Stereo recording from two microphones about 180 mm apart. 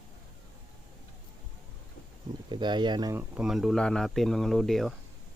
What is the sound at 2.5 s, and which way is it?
Speech, 25° right (ahead or behind).